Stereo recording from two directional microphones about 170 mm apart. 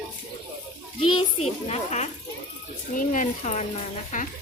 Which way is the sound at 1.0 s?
30° left (ahead or behind).